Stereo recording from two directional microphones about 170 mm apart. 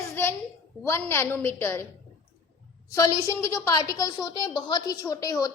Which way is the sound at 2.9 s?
20° left (ahead or behind).